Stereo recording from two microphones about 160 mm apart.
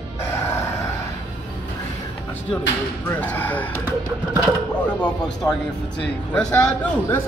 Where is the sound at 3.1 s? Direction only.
10° left (ahead or behind).